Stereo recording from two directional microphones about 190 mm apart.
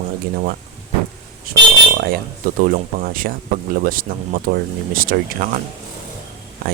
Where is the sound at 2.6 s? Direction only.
45° right (ahead or behind).